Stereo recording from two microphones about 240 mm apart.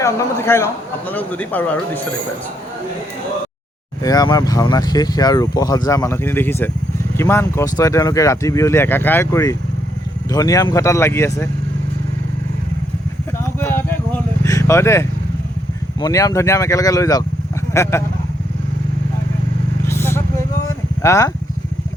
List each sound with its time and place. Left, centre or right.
0.0 s speech: centre
4.0 s speech: centre
13.4 s a sound: centre
14.4 s speech: centre
19.8 s vehicle: centre
21.0 s speech: centre